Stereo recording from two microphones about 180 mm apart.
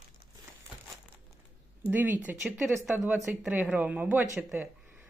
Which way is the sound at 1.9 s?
10° right (ahead or behind).